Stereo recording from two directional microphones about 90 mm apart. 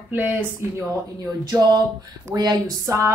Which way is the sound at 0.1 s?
20° right (ahead or behind).